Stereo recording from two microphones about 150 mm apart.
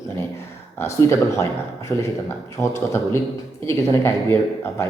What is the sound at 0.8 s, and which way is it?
A man's voice, 20° left (ahead or behind).